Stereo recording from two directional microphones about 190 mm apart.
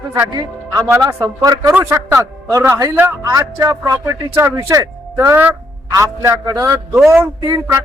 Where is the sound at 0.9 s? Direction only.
15° right (ahead or behind).